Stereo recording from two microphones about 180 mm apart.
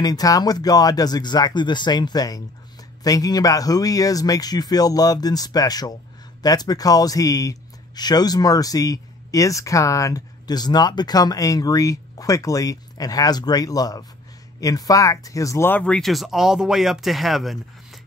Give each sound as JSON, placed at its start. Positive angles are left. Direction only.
{"t": 0.0, "sound": "speech", "side_deg": 20}